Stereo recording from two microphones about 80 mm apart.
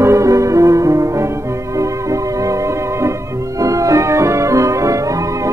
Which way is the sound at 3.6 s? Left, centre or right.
Right.